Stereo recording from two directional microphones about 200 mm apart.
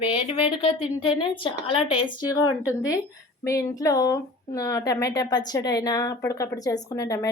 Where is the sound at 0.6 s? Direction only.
25° left (ahead or behind).